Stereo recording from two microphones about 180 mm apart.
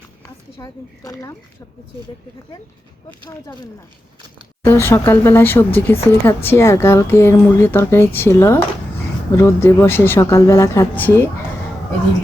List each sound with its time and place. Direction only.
0.5 s speech: 20° left (ahead or behind)
3.2 s speech: 25° left (ahead or behind)
4.6 s a woman's voice: 10° left (ahead or behind)